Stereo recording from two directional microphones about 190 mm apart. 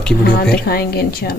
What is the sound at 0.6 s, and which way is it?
Speech, 55° left (ahead or behind).